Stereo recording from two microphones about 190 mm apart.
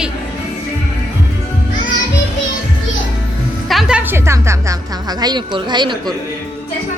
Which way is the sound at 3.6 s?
Centre (ahead or behind).